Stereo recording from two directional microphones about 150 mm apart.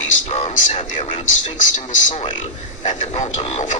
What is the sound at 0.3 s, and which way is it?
Speech, 45° left (ahead or behind).